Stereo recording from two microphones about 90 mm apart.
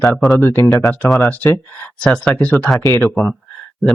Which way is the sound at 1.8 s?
10° left (ahead or behind).